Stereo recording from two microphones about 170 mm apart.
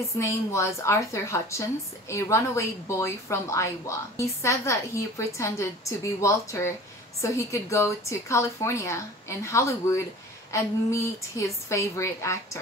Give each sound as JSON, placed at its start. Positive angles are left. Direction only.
{"t": 0.2, "sound": "speech", "side_deg": 15}